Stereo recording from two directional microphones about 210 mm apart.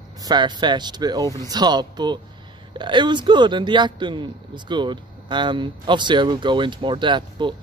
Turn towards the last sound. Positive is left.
turn(degrees=-20)  # may be behind; listen again after turning